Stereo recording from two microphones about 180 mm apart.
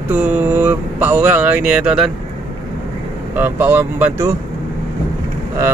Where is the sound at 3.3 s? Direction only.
10° right (ahead or behind).